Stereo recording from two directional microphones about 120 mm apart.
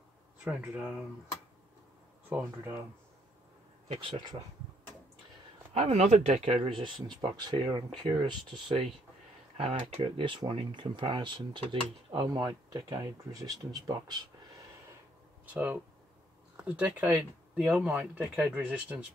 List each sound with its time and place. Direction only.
0.4 s speech: 10° right (ahead or behind)
2.2 s speech: 15° right (ahead or behind)
3.9 s speech: 45° right (ahead or behind)
5.8 s speech: 60° right (ahead or behind)
6.8 s speech: 40° right (ahead or behind)
15.4 s speech: 15° right (ahead or behind)
17.0 s speech: 5° right (ahead or behind)